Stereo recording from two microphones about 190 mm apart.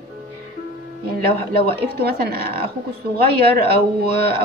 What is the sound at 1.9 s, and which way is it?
A woman's voice, 55° right (ahead or behind).